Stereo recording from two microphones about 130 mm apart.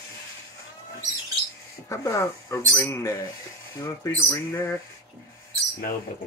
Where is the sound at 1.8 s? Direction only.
25° left (ahead or behind).